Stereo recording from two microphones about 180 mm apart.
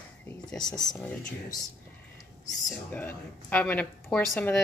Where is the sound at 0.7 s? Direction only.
25° left (ahead or behind).